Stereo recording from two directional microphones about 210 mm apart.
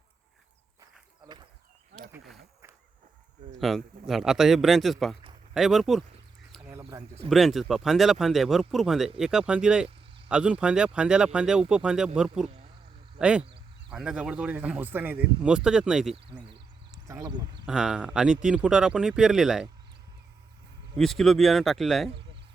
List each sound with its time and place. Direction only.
3.6 s speech: centre (ahead or behind)
6.8 s speech: 25° right (ahead or behind)
7.3 s speech: centre (ahead or behind)
17.1 s speech: 15° right (ahead or behind)
17.7 s speech: 5° right (ahead or behind)
20.9 s speech: centre (ahead or behind)